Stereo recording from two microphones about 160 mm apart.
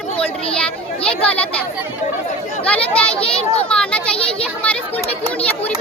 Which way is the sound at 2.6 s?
5° left (ahead or behind).